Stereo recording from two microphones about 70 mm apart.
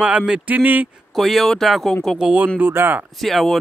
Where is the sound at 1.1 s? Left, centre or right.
Centre.